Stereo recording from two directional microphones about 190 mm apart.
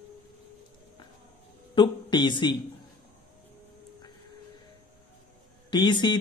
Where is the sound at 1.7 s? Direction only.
25° left (ahead or behind).